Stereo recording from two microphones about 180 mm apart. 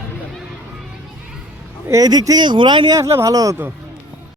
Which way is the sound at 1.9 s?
20° right (ahead or behind).